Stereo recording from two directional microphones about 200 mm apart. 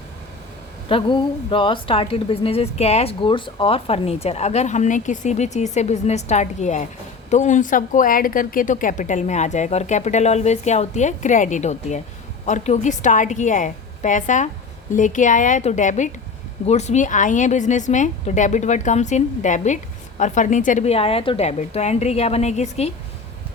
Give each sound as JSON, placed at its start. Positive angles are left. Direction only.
{"t": 0.9, "sound": "a woman's voice", "side_deg": 25}